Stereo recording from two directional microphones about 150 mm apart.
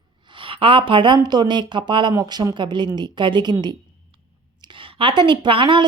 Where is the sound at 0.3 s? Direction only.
35° right (ahead or behind).